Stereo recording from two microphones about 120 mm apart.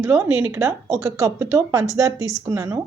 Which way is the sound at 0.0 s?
20° right (ahead or behind).